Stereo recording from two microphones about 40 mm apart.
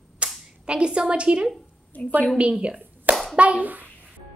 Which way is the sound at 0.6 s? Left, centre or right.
Right.